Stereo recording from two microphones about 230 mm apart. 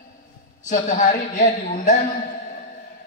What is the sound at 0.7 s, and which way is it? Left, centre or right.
A woman's voice, left.